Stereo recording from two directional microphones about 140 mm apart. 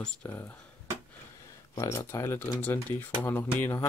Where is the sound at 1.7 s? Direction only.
25° left (ahead or behind).